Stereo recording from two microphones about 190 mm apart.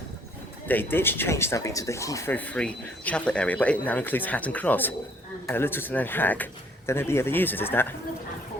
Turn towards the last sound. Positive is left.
turn(degrees=10)  # may be behind; listen again after turning